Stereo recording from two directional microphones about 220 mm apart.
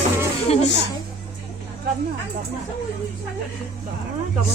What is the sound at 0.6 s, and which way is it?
Music, 55° left (ahead or behind).